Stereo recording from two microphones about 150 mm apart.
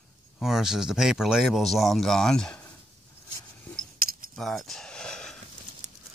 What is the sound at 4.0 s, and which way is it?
Keys jangling, 75° right (ahead or behind).